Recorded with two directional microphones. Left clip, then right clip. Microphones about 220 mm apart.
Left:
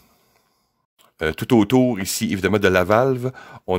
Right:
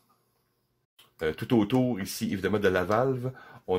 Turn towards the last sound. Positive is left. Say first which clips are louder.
# left 9 dB
turn(degrees=45)  # may be behind; listen again after turning